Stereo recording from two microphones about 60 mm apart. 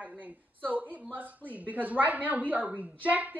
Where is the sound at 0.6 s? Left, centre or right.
Right.